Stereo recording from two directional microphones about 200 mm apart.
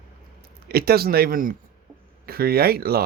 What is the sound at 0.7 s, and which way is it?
Speech, 50° right (ahead or behind).